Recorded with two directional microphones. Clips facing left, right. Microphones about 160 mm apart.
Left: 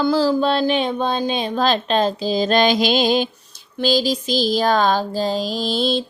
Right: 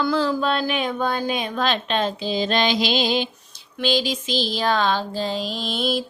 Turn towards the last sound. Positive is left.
turn(degrees=30)  # may be behind; listen again after turning